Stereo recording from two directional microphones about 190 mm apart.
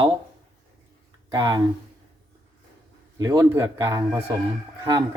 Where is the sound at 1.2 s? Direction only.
20° right (ahead or behind).